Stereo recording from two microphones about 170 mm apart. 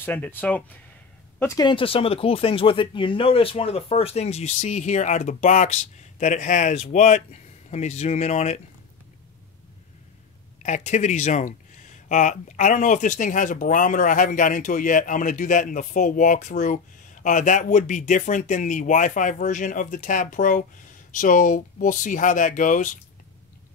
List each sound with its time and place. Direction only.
0.0 s speech: 10° left (ahead or behind)
1.7 s speech: 30° left (ahead or behind)
10.6 s speech: 45° left (ahead or behind)